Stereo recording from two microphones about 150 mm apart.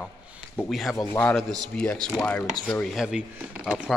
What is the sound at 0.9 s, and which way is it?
Speech, 15° left (ahead or behind).